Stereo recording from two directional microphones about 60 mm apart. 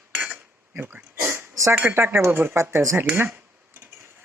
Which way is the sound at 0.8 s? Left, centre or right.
Right.